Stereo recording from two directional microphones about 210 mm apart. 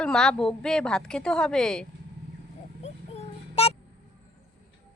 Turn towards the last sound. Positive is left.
turn(degrees=30)  # may be behind; listen again after turning